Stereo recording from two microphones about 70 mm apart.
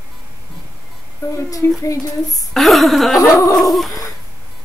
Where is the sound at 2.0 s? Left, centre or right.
Left.